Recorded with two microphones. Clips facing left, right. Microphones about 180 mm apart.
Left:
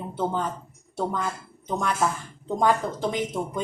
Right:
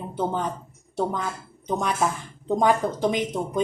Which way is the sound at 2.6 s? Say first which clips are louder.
Right 1 dB; 15° right (ahead or behind).